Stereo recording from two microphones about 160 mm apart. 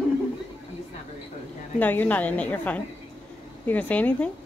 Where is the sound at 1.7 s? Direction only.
10° left (ahead or behind).